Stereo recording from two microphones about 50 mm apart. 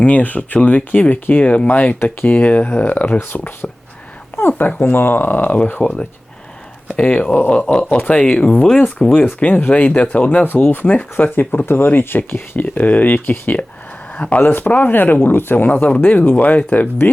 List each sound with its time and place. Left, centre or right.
0.0 s speech: left
5.8 s speech: left
9.6 s speech: left
10.4 s speech: left
12.6 s speech: left